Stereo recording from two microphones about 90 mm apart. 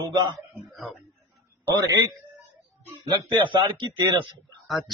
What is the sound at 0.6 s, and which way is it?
Speech, centre (ahead or behind).